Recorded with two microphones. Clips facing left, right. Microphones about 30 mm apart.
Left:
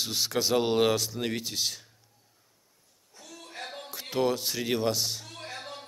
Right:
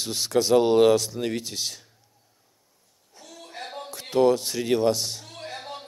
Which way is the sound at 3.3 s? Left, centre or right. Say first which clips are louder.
Right 3 dB; centre.